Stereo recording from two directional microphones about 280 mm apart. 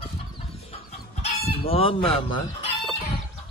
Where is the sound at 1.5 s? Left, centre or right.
Centre.